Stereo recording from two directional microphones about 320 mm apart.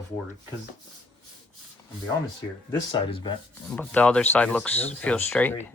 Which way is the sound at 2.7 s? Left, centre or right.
Centre.